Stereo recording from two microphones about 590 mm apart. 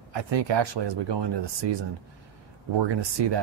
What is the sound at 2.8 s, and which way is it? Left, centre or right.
Speech, right.